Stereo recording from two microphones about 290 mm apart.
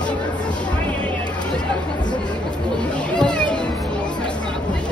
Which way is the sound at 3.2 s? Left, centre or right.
Centre.